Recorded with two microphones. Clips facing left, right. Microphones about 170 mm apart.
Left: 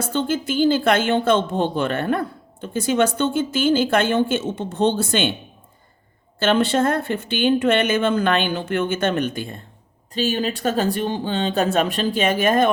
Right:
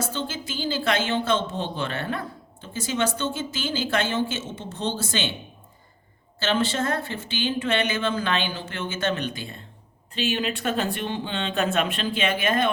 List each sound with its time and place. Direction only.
0.0 s a woman's voice: 55° left (ahead or behind)
6.4 s a woman's voice: 55° left (ahead or behind)
10.2 s speech: 40° left (ahead or behind)